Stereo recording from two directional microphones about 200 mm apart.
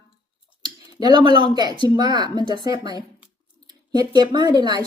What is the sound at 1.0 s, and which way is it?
Speech, 20° right (ahead or behind).